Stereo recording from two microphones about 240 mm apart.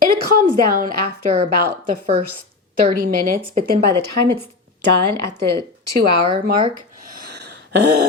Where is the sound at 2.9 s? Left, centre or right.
Right.